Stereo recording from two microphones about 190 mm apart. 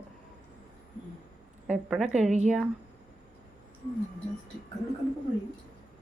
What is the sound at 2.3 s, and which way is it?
Speech, 35° right (ahead or behind).